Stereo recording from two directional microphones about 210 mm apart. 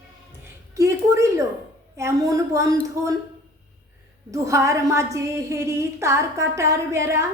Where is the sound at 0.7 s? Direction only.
15° right (ahead or behind).